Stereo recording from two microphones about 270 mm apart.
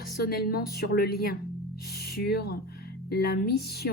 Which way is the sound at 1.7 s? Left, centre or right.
Left.